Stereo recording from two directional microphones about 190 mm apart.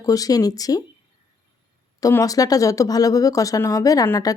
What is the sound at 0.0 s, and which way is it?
Speech, 20° left (ahead or behind).